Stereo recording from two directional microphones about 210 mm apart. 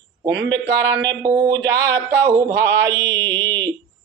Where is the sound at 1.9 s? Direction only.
10° left (ahead or behind).